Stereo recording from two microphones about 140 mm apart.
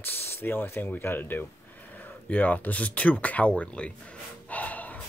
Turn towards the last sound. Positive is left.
turn(degrees=10)  # may be behind; listen again after turning